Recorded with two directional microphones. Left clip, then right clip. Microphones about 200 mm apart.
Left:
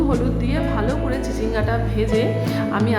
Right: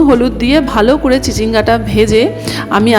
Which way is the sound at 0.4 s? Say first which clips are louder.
Right 13 dB; 45° right (ahead or behind).